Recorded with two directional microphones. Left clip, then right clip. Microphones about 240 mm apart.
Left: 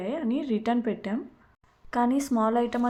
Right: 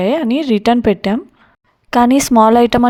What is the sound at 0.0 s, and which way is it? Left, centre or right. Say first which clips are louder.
Speech: right 15 dB; right.